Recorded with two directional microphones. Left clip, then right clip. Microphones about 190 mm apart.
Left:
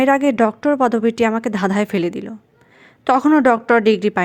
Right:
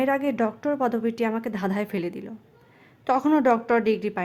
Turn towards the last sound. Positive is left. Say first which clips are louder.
# left 8 dB
turn(degrees=30)  # may be behind; listen again after turning